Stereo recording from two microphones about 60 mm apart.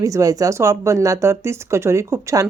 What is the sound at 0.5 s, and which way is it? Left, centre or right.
Speech, right.